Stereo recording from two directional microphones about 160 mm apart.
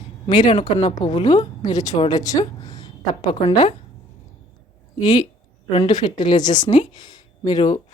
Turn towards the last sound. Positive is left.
turn(degrees=25)  # may be behind; listen again after turning